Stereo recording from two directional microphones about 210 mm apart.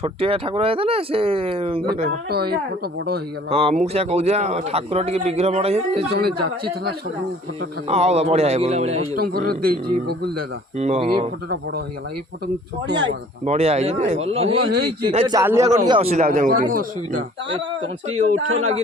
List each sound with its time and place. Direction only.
0.0 s speech: 25° right (ahead or behind)
2.3 s a man's voice: 45° right (ahead or behind)
3.5 s speech: 30° right (ahead or behind)
6.1 s a man's voice: 50° right (ahead or behind)
7.9 s speech: 30° right (ahead or behind)
9.2 s a man's voice: 45° right (ahead or behind)
10.8 s speech: 30° right (ahead or behind)
13.4 s speech: 30° right (ahead or behind)
15.4 s a man's voice: 15° right (ahead or behind)
15.9 s speech: 30° right (ahead or behind)
16.2 s speech: 40° right (ahead or behind)
18.3 s speech: 75° right (ahead or behind)